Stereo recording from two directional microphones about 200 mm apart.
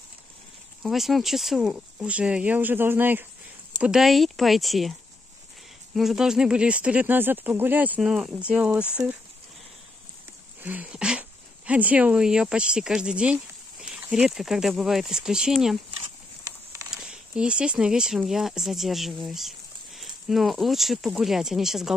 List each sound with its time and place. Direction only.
0.8 s speech: centre (ahead or behind)
5.9 s speech: centre (ahead or behind)
10.6 s speech: 10° right (ahead or behind)
16.9 s speech: 5° right (ahead or behind)